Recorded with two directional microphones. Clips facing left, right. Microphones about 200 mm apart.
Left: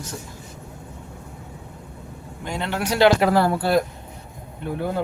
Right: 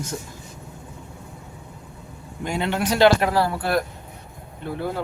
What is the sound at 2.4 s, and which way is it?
Speech, 10° right (ahead or behind).